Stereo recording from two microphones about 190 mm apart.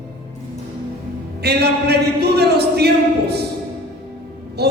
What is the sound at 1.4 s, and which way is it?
Speech, 60° right (ahead or behind).